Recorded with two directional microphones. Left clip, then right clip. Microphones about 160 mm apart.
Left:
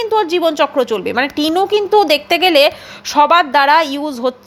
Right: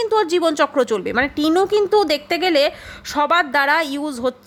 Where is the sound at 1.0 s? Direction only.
20° right (ahead or behind).